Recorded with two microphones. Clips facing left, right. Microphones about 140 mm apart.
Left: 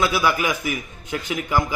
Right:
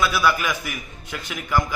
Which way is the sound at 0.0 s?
20° left (ahead or behind).